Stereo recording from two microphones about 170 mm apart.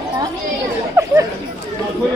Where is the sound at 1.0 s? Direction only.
15° right (ahead or behind).